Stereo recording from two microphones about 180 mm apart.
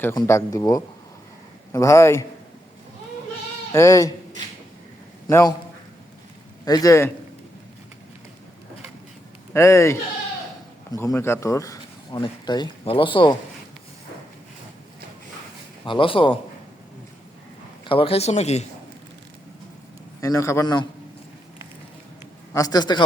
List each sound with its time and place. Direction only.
0.0 s speech: 15° left (ahead or behind)
3.7 s a sound: 15° left (ahead or behind)
5.3 s speech: 20° left (ahead or behind)
6.7 s speech: 20° left (ahead or behind)
9.5 s speech: 15° left (ahead or behind)
15.9 s speech: 30° left (ahead or behind)
17.8 s a man's voice: 30° left (ahead or behind)
20.2 s speech: 15° left (ahead or behind)
22.5 s speech: 20° left (ahead or behind)